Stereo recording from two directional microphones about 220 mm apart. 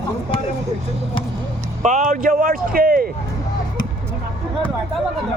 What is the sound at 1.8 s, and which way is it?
Speech, 35° right (ahead or behind).